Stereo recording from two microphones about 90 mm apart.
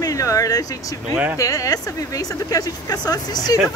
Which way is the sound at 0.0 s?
40° left (ahead or behind).